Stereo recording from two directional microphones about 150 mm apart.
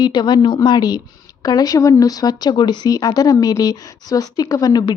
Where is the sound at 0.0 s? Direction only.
30° left (ahead or behind).